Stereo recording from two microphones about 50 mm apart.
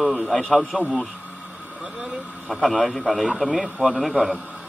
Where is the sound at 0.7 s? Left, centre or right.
Centre.